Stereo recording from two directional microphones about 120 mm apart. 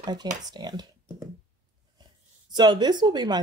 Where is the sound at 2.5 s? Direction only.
35° right (ahead or behind).